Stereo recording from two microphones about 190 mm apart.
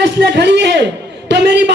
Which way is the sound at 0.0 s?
65° right (ahead or behind).